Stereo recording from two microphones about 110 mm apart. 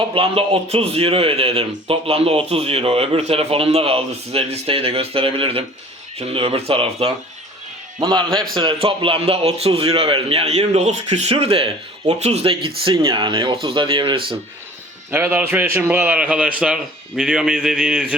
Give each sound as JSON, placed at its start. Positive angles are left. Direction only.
{"t": 0.1, "sound": "a man's voice", "side_deg": -55}
{"t": 8.5, "sound": "a man's voice", "side_deg": -50}
{"t": 13.0, "sound": "speech", "side_deg": -40}
{"t": 13.9, "sound": "speech", "side_deg": -45}
{"t": 15.1, "sound": "a man's voice", "side_deg": -15}